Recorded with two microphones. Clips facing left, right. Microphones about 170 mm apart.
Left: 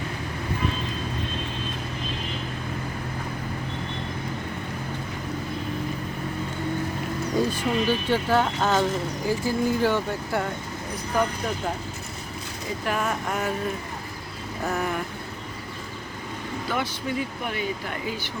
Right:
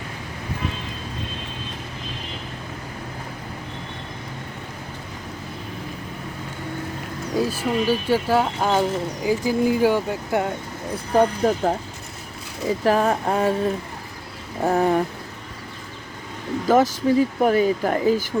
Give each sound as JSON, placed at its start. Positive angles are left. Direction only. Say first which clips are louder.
{"t": 7.3, "sound": "speech", "louder": "right 3 dB", "side_deg": -5}
{"t": 10.9, "sound": "speech", "louder": "right 7 dB", "side_deg": -30}
{"t": 12.8, "sound": "speech", "louder": "right 8 dB", "side_deg": -35}
{"t": 14.6, "sound": "speech", "louder": "right 9 dB", "side_deg": -30}
{"t": 16.6, "sound": "speech", "louder": "right 12 dB", "side_deg": -40}